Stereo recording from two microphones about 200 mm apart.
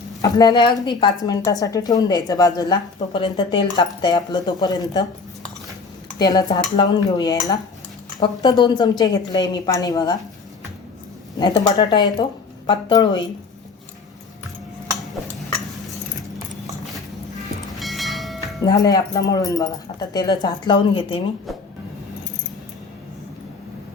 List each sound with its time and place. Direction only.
0.2 s a woman's voice: 20° left (ahead or behind)
6.1 s a woman's voice: 20° left (ahead or behind)
11.3 s a woman's voice: 20° left (ahead or behind)
17.7 s train: centre (ahead or behind)
18.6 s a woman's voice: 20° left (ahead or behind)